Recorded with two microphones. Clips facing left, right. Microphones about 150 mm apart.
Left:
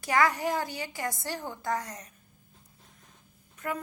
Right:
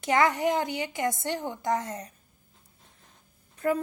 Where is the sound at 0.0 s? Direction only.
20° right (ahead or behind).